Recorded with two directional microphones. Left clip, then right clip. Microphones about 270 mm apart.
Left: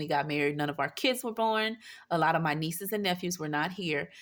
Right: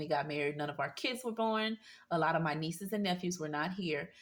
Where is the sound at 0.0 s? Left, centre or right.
Left.